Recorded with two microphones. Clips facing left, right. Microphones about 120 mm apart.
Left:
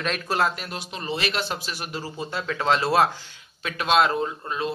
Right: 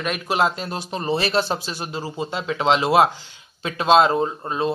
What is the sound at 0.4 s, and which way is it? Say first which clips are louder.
A man's voice: right 6 dB; 25° right (ahead or behind).